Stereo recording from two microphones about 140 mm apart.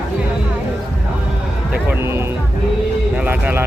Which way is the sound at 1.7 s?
15° right (ahead or behind).